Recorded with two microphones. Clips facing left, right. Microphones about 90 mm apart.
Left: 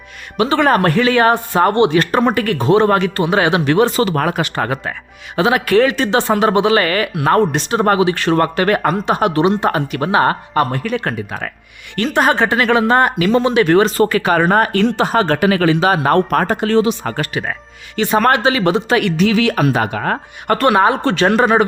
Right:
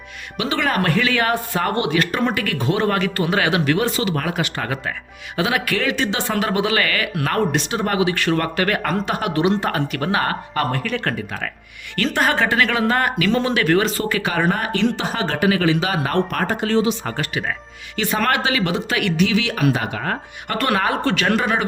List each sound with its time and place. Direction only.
0.3 s speech: 35° left (ahead or behind)
13.7 s speech: 40° left (ahead or behind); by 17.2 s 55° left (ahead or behind)
17.3 s speech: 40° left (ahead or behind)
20.7 s speech: 25° left (ahead or behind)